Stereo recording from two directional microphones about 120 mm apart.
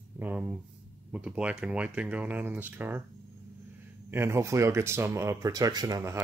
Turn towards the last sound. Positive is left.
turn(degrees=-30)  # may be behind; listen again after turning